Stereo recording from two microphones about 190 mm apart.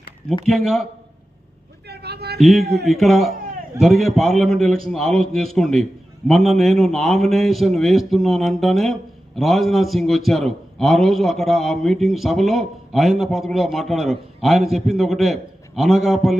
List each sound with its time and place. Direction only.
0.4 s a man's voice: centre (ahead or behind)
1.9 s a sound: 60° right (ahead or behind)
2.4 s a man's voice: centre (ahead or behind)